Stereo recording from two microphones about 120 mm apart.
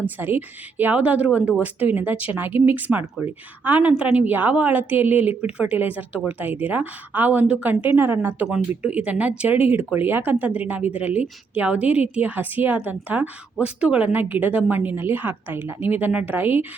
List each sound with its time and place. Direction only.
0.0 s a woman's voice: 15° right (ahead or behind)